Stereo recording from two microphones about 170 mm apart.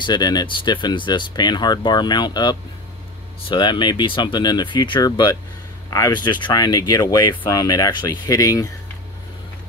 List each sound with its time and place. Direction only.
0.0 s speech: 25° left (ahead or behind)